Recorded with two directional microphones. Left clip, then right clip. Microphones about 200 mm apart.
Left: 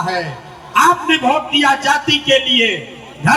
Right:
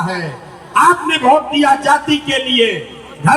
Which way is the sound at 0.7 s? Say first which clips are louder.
Right 1 dB; 40° left (ahead or behind).